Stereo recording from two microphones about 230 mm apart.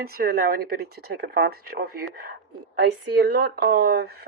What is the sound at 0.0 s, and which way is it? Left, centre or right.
Speech, right.